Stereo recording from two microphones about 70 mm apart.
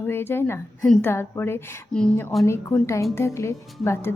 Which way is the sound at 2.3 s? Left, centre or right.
Centre.